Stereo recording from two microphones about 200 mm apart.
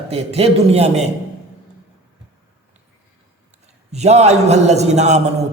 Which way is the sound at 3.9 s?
35° right (ahead or behind).